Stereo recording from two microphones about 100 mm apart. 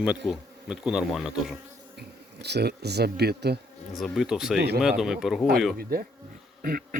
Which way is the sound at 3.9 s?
Centre (ahead or behind).